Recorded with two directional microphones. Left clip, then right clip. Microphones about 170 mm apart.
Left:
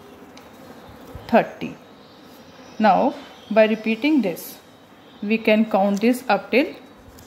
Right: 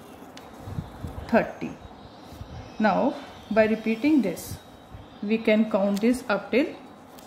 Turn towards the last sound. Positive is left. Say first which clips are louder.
# left 5 dB
turn(degrees=40)  # may be behind; listen again after turning